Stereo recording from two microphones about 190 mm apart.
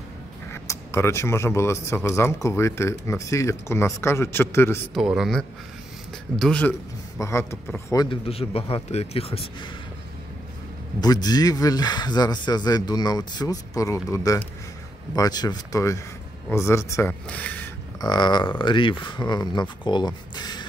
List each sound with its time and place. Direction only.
0.5 s speech: 15° left (ahead or behind)
4.9 s a man's voice: centre (ahead or behind)
7.2 s speech: 15° left (ahead or behind); by 9.7 s 30° left (ahead or behind)
11.0 s speech: 20° left (ahead or behind)
18.0 s speech: 25° left (ahead or behind)